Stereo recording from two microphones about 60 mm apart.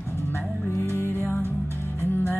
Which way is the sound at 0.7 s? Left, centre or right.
Left.